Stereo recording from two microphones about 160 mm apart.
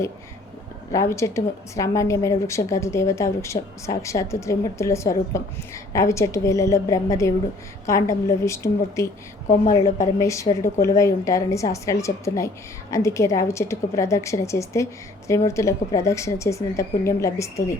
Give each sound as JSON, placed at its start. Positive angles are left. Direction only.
{"t": 0.9, "sound": "a woman's voice", "side_deg": 20}
{"t": 10.2, "sound": "a woman's voice", "side_deg": 20}